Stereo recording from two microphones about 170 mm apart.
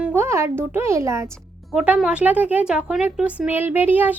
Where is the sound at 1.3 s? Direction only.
Centre (ahead or behind).